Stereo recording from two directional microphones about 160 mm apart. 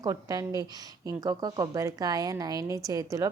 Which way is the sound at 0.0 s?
25° right (ahead or behind).